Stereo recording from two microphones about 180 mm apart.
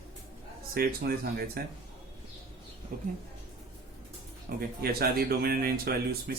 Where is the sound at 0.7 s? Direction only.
60° right (ahead or behind).